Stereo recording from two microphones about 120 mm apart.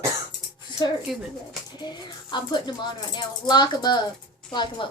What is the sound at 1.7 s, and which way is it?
Speech, 35° left (ahead or behind).